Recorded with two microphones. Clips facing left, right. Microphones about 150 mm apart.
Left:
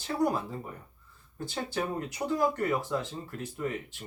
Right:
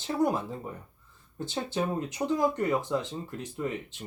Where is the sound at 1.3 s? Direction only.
20° right (ahead or behind).